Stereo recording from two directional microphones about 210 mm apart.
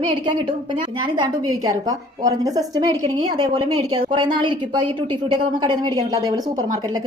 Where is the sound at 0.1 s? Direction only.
20° right (ahead or behind).